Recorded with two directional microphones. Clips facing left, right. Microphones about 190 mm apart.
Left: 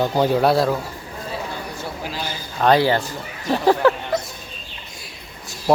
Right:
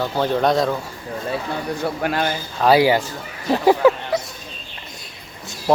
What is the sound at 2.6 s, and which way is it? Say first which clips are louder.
Speech: right 1 dB; 10° right (ahead or behind).